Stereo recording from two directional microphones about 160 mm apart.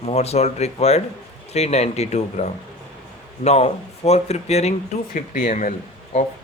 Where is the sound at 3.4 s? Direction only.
40° left (ahead or behind).